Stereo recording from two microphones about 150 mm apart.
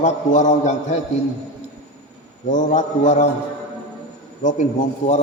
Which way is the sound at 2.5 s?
55° left (ahead or behind).